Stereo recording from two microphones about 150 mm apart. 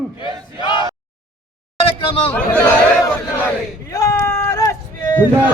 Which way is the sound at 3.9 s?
20° left (ahead or behind).